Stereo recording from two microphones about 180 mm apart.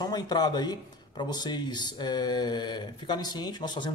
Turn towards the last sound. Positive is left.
turn(degrees=25)  # may be behind; listen again after turning